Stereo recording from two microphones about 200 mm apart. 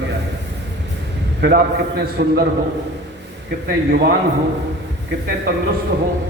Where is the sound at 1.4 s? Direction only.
50° right (ahead or behind).